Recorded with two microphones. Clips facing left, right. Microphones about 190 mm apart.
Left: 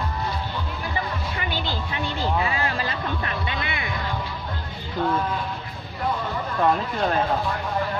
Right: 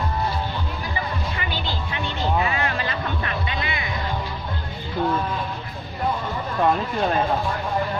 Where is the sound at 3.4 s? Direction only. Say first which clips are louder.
Right 1 dB; 55° left (ahead or behind).